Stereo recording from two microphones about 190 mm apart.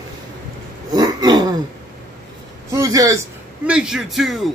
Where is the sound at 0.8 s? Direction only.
20° right (ahead or behind).